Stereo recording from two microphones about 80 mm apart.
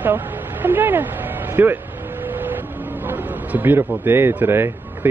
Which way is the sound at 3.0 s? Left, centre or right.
Right.